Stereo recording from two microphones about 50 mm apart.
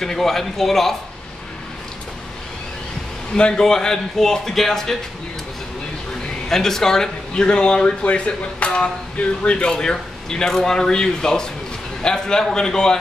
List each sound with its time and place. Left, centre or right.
0.0 s speech: centre
3.3 s a man's voice: centre
6.5 s a man's voice: centre